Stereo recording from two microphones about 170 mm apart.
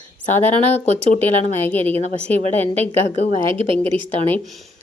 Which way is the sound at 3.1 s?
40° left (ahead or behind).